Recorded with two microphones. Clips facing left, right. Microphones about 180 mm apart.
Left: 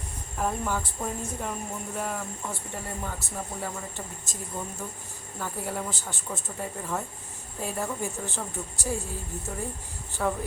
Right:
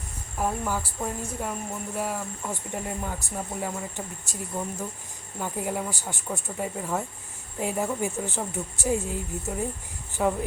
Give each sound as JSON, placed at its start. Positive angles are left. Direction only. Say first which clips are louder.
{"t": 0.3, "sound": "speech", "louder": "right 1 dB", "side_deg": -10}